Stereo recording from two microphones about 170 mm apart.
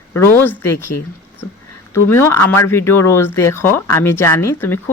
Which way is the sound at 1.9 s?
15° left (ahead or behind).